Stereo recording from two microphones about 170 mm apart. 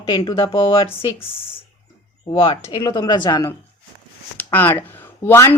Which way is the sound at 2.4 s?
30° left (ahead or behind).